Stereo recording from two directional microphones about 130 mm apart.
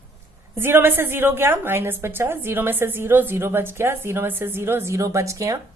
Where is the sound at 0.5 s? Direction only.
15° right (ahead or behind).